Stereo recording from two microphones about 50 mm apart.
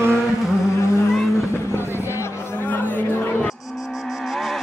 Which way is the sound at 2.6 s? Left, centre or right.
Left.